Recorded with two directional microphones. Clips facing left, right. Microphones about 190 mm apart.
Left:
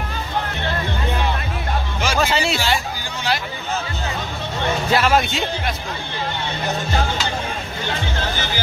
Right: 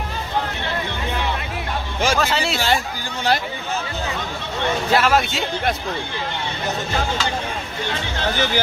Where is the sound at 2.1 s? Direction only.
Centre (ahead or behind).